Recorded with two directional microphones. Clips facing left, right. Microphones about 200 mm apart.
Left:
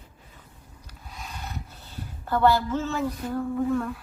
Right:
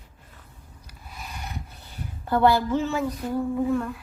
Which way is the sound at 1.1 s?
10° right (ahead or behind).